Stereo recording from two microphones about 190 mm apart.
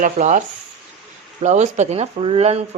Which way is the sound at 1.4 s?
35° right (ahead or behind).